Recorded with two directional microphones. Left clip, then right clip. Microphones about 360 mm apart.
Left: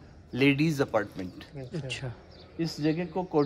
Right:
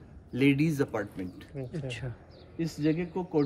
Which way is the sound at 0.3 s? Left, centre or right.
Centre.